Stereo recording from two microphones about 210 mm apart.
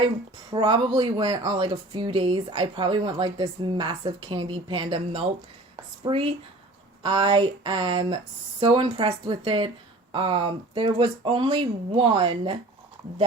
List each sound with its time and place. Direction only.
0.5 s speech: 20° right (ahead or behind)